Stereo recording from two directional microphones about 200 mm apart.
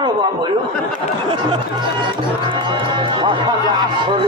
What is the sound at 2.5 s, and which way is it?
Music, 25° right (ahead or behind).